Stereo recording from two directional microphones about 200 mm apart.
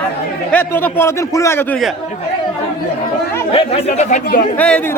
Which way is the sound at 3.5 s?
30° left (ahead or behind).